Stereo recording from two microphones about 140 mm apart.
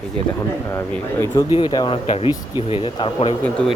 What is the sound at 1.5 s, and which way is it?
Speech, 35° left (ahead or behind).